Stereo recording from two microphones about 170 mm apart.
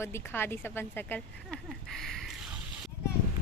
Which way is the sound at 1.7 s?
Centre (ahead or behind).